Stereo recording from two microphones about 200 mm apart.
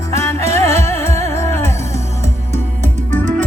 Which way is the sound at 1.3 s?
15° left (ahead or behind).